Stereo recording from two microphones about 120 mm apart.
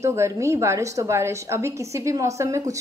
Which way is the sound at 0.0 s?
25° right (ahead or behind).